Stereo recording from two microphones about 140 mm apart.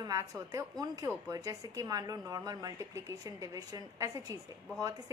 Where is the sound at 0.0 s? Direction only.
25° right (ahead or behind).